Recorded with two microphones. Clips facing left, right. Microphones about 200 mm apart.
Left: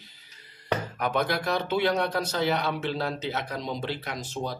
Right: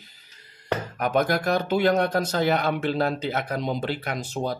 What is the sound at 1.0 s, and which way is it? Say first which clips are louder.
Speech: right 6 dB; 45° right (ahead or behind).